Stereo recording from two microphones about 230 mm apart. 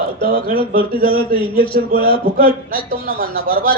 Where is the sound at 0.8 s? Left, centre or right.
Left.